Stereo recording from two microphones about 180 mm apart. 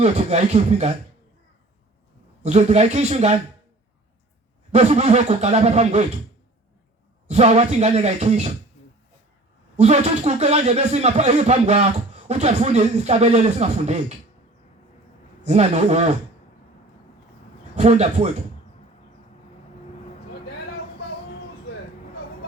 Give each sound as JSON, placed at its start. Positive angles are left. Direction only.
{"t": 0.0, "sound": "speech", "side_deg": -35}
{"t": 2.4, "sound": "speech", "side_deg": -35}
{"t": 4.7, "sound": "speech", "side_deg": -35}
{"t": 7.3, "sound": "speech", "side_deg": -35}
{"t": 8.8, "sound": "a sound", "side_deg": 35}
{"t": 9.7, "sound": "speech", "side_deg": -40}
{"t": 15.4, "sound": "speech", "side_deg": -35}
{"t": 17.7, "sound": "speech", "side_deg": -35}